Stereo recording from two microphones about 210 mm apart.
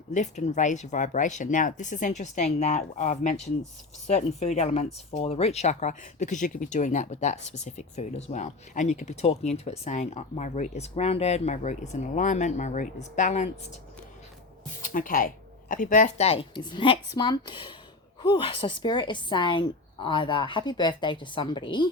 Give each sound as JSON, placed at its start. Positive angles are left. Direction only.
{"t": 0.1, "sound": "speech", "side_deg": 35}
{"t": 14.8, "sound": "speech", "side_deg": 40}